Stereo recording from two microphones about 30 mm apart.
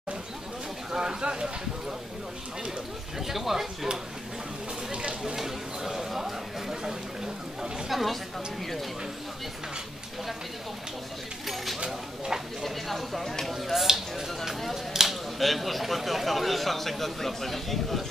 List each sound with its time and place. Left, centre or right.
0.9 s speech: right
3.2 s speech: centre
5.2 s chatter: centre
7.9 s speech: centre
11.4 s a sound: centre
12.6 s chopping: centre
13.5 s a sound: centre
15.3 s a man's voice: centre